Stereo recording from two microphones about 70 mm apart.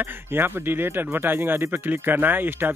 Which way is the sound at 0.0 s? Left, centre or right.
Right.